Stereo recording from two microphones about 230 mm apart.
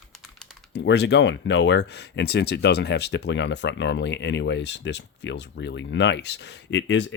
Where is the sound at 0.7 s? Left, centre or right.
Left.